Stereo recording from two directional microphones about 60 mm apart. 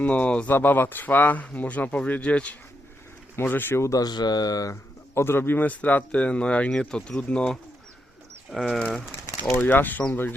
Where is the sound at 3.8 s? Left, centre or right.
Left.